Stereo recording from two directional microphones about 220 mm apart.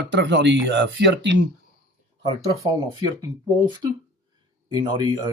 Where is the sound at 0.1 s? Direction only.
55° right (ahead or behind).